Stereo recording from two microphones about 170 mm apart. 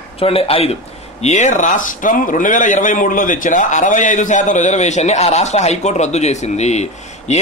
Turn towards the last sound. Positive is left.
turn(degrees=40)  # may be behind; listen again after turning